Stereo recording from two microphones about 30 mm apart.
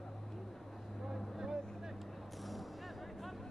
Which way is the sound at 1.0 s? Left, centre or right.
Centre.